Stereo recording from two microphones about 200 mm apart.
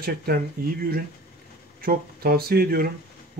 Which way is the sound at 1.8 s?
50° right (ahead or behind).